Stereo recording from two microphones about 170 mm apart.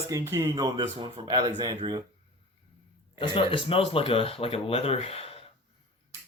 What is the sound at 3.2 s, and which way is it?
Speech, 30° left (ahead or behind).